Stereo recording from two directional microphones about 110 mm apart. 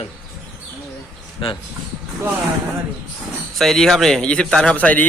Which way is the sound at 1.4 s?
50° left (ahead or behind).